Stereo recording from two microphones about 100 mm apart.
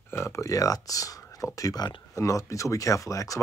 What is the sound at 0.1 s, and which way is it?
Speech, 25° left (ahead or behind).